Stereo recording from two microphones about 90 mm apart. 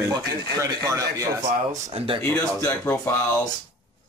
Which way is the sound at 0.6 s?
35° right (ahead or behind).